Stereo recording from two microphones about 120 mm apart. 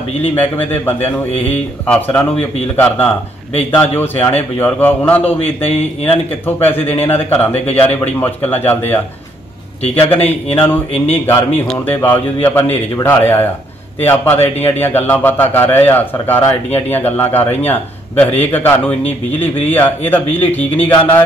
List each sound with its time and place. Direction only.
0.3 s a man's voice: 15° left (ahead or behind)
3.7 s a man's voice: 15° left (ahead or behind)
10.1 s a man's voice: 55° left (ahead or behind)
10.6 s a man's voice: 15° left (ahead or behind)